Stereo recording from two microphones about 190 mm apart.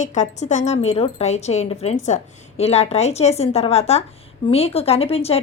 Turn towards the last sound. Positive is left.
turn(degrees=30)  # may be behind; listen again after turning